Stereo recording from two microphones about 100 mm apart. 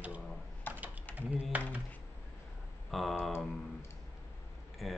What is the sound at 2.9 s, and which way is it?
Speech, centre (ahead or behind).